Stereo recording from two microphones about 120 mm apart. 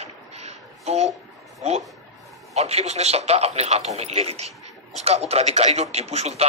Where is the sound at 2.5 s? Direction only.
60° right (ahead or behind).